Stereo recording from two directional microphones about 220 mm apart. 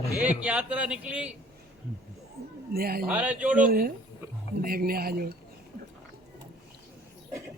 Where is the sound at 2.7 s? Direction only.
45° right (ahead or behind).